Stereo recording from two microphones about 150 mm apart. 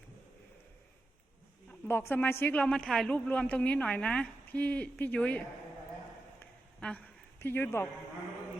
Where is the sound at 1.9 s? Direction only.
15° left (ahead or behind).